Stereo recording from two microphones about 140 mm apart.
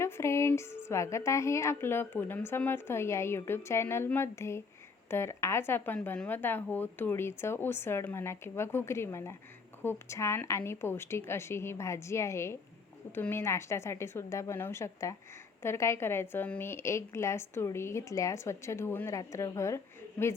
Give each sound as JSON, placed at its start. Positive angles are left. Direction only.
{"t": 0.0, "sound": "a woman's voice", "side_deg": 20}